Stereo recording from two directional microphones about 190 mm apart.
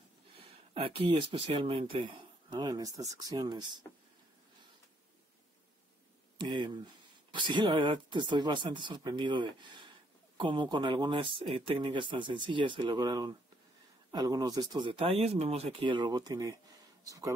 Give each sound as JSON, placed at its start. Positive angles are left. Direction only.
{"t": 0.4, "sound": "speech", "side_deg": -30}
{"t": 6.3, "sound": "speech", "side_deg": -25}